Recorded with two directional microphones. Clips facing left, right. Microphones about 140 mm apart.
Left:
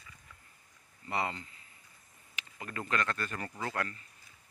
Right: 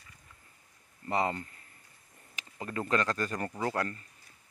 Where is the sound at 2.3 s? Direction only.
30° right (ahead or behind).